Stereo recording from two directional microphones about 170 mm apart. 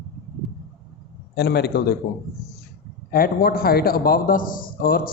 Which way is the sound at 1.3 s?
75° left (ahead or behind).